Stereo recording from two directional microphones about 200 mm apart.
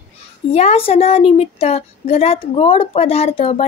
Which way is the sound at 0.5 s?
30° left (ahead or behind).